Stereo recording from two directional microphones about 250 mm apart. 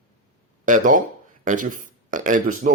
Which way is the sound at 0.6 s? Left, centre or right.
Right.